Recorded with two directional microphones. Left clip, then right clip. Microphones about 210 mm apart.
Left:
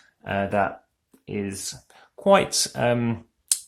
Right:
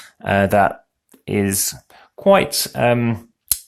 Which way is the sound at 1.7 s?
15° right (ahead or behind).